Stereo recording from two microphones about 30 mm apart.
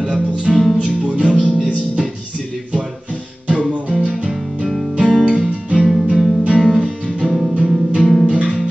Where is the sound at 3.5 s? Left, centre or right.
Right.